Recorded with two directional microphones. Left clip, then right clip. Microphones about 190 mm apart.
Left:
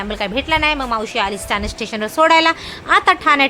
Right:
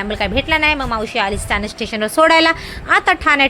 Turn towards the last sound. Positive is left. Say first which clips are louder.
# even
turn(degrees=-5)  # may be behind; listen again after turning